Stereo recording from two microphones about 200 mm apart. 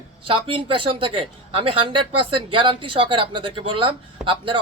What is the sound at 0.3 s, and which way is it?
Speech, 25° right (ahead or behind).